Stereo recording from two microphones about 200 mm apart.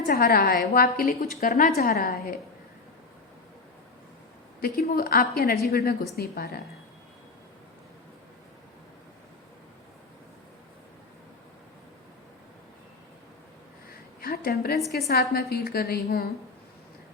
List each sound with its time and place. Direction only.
0.1 s a woman's voice: 50° left (ahead or behind)
4.9 s a woman's voice: 45° left (ahead or behind)
14.2 s a woman's voice: 50° left (ahead or behind)